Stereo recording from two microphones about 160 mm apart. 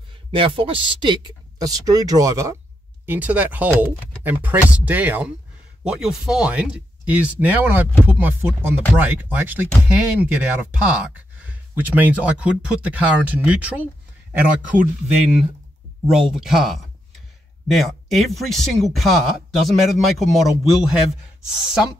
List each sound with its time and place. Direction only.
0.3 s speech: 35° right (ahead or behind)
3.1 s speech: 10° right (ahead or behind)